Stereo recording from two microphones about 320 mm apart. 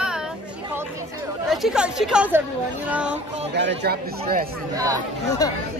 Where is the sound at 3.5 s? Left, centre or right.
Right.